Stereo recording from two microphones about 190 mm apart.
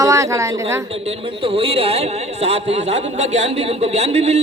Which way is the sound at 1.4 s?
30° right (ahead or behind).